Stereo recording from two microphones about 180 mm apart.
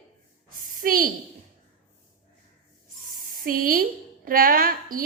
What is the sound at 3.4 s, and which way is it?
A woman's voice, 50° right (ahead or behind).